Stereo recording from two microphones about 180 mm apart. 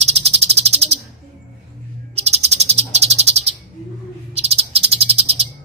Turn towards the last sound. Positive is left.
turn(degrees=-35)  # may be behind; listen again after turning